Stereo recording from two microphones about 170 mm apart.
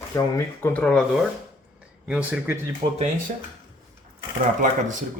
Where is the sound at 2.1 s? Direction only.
10° right (ahead or behind).